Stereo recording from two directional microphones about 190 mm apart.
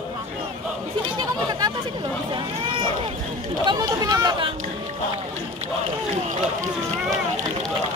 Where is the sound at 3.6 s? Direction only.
20° right (ahead or behind).